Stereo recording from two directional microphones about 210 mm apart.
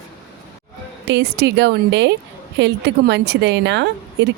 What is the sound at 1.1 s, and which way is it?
A woman's voice, 55° right (ahead or behind).